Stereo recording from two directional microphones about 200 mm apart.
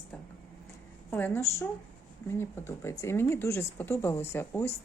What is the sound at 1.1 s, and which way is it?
A woman's voice, 10° left (ahead or behind).